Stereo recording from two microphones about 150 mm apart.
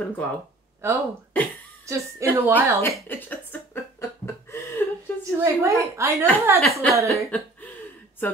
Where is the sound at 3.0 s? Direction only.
10° left (ahead or behind).